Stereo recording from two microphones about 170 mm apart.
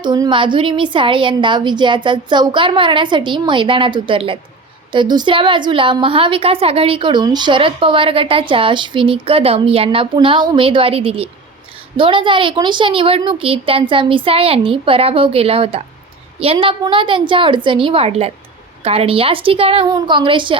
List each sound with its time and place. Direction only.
0.0 s a woman's voice: 25° right (ahead or behind)